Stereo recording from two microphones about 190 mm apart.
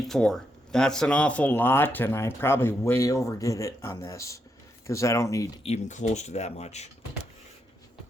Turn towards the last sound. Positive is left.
turn(degrees=35)  # may be behind; listen again after turning